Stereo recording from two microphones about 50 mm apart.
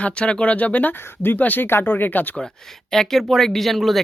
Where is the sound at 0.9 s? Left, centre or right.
Left.